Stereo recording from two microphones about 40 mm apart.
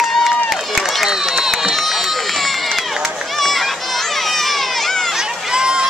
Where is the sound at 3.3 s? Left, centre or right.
Centre.